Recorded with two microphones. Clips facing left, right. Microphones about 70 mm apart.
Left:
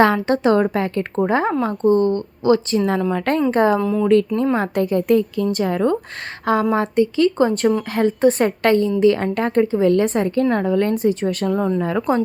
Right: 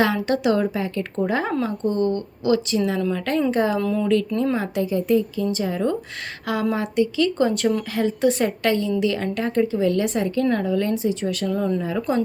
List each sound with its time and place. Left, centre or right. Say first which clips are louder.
0.0 s speech: left 5 dB; left
1.1 s speech: left 4 dB; left
3.8 s speech: left 3 dB; centre
4.0 s a woman's voice: left 6 dB; left
6.4 s speech: left 6 dB; left
11.8 s a woman's voice: left 4 dB; left